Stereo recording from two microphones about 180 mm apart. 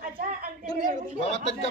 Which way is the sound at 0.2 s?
50° right (ahead or behind).